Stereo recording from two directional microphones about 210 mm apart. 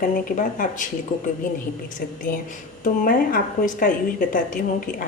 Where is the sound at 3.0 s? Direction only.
40° left (ahead or behind).